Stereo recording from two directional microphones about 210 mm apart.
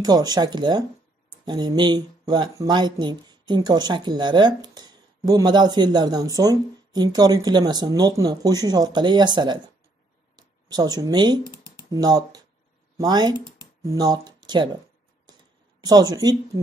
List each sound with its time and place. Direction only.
0.0 s speech: 20° right (ahead or behind)
15.8 s speech: 15° right (ahead or behind)